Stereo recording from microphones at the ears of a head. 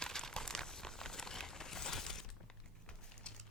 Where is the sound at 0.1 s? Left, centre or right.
Centre.